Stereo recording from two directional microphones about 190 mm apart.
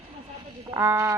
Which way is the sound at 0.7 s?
15° right (ahead or behind).